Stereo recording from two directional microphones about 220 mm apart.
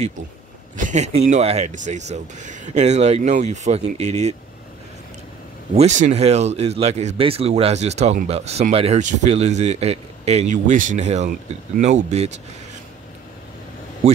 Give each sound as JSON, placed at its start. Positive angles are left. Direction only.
{"t": 0.7, "sound": "speech", "side_deg": -35}
{"t": 5.8, "sound": "speech", "side_deg": -30}
{"t": 14.0, "sound": "speech", "side_deg": -30}